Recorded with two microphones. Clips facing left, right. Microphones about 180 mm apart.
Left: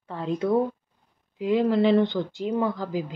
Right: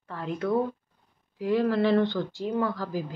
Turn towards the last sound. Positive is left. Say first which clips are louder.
# left 2 dB
turn(degrees=20)  # may be behind; listen again after turning